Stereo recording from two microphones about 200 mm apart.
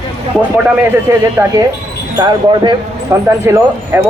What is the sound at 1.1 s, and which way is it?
Speech, 15° right (ahead or behind).